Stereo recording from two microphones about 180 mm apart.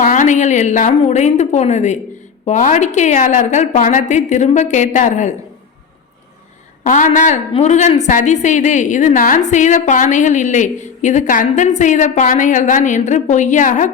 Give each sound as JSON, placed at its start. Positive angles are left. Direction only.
{"t": 0.0, "sound": "a woman's voice", "side_deg": 45}
{"t": 6.8, "sound": "a woman's voice", "side_deg": 45}